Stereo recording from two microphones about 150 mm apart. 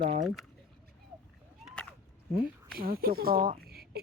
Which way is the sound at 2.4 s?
80° right.